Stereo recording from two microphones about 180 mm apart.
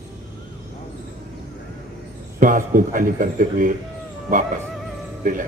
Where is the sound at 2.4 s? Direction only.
50° right (ahead or behind).